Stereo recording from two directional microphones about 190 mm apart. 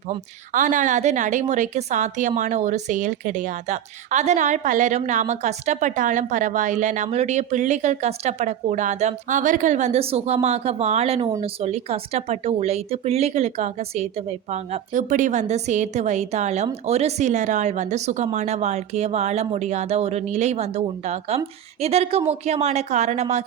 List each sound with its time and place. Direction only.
0.5 s a woman's voice: 40° right (ahead or behind)